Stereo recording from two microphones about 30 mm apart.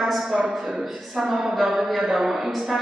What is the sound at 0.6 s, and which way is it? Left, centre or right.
Speech, right.